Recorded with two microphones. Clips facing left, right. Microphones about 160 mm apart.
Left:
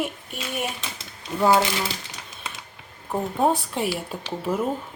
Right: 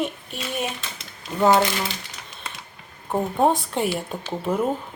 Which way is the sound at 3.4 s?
Centre (ahead or behind).